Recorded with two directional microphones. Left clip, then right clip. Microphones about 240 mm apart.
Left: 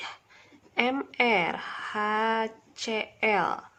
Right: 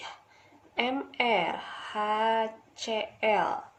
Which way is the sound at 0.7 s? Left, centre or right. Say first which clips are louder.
Left 3 dB; left.